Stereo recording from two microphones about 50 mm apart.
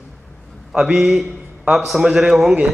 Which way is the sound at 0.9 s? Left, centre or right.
Centre.